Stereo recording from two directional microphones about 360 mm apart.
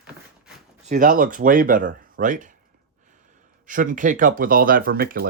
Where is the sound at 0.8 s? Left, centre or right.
Right.